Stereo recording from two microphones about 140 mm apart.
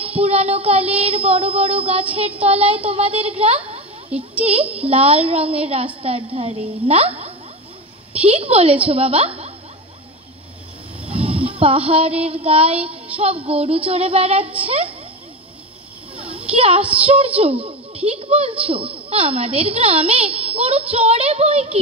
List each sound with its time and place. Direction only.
0.2 s a woman's voice: 45° right (ahead or behind)
11.1 s a sound: 45° right (ahead or behind)
11.9 s a woman's voice: 45° right (ahead or behind)
16.2 s a sound: 45° right (ahead or behind)
17.0 s a woman's voice: 45° right (ahead or behind)
17.9 s a child's voice: 10° right (ahead or behind)
18.2 s a woman's voice: 45° right (ahead or behind)
20.5 s child singing: 45° right (ahead or behind)
20.9 s a woman's voice: 45° right (ahead or behind)